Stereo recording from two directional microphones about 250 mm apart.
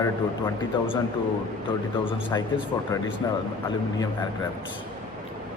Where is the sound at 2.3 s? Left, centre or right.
Centre.